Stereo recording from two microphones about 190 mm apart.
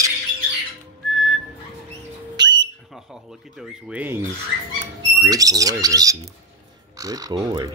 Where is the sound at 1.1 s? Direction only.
Centre (ahead or behind).